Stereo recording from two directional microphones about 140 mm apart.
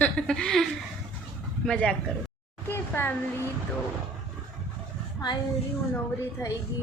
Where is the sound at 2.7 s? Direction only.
15° left (ahead or behind).